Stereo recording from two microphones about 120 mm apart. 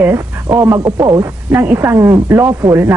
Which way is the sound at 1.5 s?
20° right (ahead or behind).